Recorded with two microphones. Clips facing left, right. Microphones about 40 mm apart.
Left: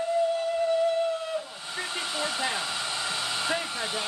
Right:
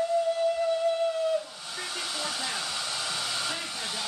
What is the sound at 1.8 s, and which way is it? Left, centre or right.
Hair dryer, left.